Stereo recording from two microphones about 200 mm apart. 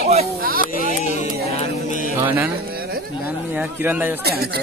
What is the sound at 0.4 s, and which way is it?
Speech, 45° right (ahead or behind).